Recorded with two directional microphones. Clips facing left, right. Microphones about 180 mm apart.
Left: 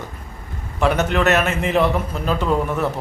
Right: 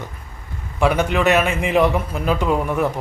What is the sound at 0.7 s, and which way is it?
A man's voice, 10° right (ahead or behind).